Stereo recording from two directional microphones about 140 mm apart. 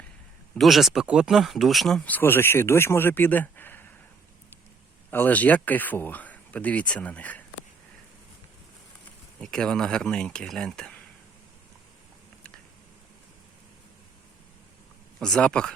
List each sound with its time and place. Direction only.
0.5 s speech: centre (ahead or behind)
2.1 s speech: 15° left (ahead or behind)
5.1 s speech: 10° left (ahead or behind)
9.4 s speech: 5° left (ahead or behind)
15.2 s speech: 5° left (ahead or behind)